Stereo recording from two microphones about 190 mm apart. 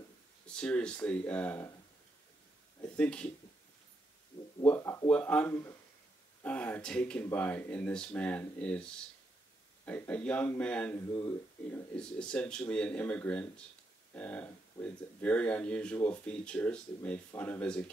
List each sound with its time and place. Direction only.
0.5 s speech: 5° left (ahead or behind)
2.8 s speech: 5° left (ahead or behind)
4.6 s speech: 15° left (ahead or behind)
11.1 s speech: 15° left (ahead or behind)
11.9 s speech: 5° left (ahead or behind)